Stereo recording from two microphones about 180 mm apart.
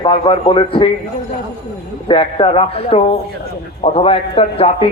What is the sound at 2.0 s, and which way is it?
A man's voice, 30° left (ahead or behind).